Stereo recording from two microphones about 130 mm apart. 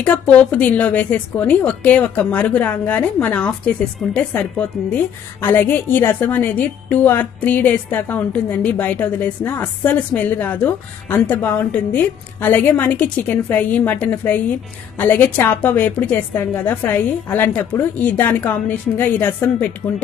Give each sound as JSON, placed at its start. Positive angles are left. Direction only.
{"t": 0.0, "sound": "a woman's voice", "side_deg": 10}